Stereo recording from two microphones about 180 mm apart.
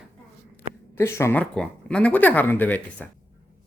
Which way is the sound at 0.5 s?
15° left (ahead or behind).